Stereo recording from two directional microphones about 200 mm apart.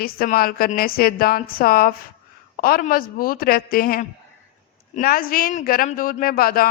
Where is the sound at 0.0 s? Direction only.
45° left (ahead or behind).